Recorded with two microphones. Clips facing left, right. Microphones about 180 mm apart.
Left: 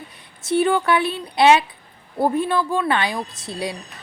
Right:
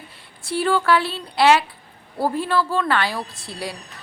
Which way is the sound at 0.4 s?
20° left (ahead or behind).